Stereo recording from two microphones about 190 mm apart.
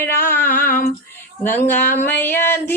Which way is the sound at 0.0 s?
10° left (ahead or behind).